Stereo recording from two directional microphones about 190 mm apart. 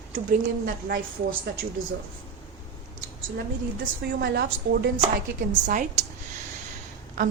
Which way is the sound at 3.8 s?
60° right (ahead or behind).